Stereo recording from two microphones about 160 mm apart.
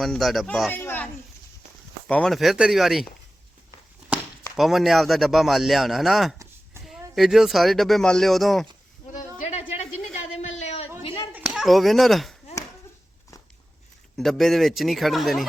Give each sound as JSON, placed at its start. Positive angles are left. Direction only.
{"t": 0.0, "sound": "speech", "side_deg": 0}
{"t": 0.7, "sound": "a sound", "side_deg": 15}
{"t": 2.0, "sound": "speech", "side_deg": 5}
{"t": 4.5, "sound": "speech", "side_deg": 0}
{"t": 9.4, "sound": "a sound", "side_deg": 40}
{"t": 11.0, "sound": "clapping", "side_deg": 35}
{"t": 11.3, "sound": "speech", "side_deg": -5}
{"t": 14.2, "sound": "speech", "side_deg": 0}